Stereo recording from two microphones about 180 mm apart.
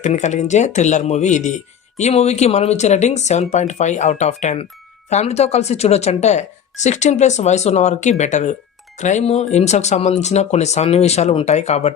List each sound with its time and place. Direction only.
0.0 s speech: 40° left (ahead or behind)